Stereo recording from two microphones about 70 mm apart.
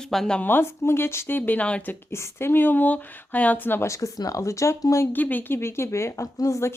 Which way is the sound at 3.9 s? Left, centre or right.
Left.